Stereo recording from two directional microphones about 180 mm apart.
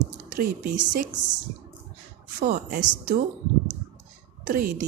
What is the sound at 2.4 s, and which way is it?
Speech, 55° right (ahead or behind).